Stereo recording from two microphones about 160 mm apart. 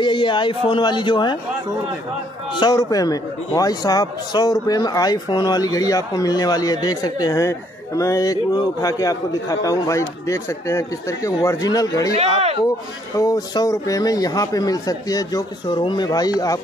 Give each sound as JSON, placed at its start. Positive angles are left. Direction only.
{"t": 0.0, "sound": "speech", "side_deg": 30}
{"t": 2.5, "sound": "speech", "side_deg": 25}
{"t": 12.1, "sound": "speech", "side_deg": -40}
{"t": 13.1, "sound": "speech", "side_deg": 20}